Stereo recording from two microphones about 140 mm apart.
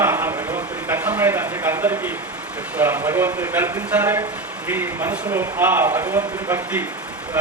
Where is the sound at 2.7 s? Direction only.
15° right (ahead or behind).